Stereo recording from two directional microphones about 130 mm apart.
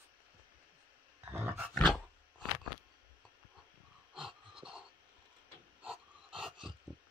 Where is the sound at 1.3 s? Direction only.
20° right (ahead or behind).